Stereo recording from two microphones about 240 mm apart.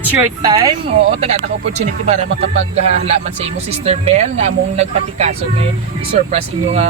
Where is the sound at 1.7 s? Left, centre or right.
Right.